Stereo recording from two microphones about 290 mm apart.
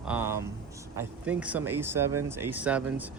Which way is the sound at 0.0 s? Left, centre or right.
Centre.